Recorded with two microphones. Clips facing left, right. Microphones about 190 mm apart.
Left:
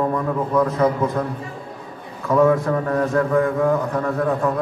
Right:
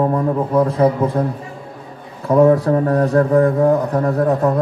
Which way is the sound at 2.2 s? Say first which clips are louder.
Right 4 dB; 35° right (ahead or behind).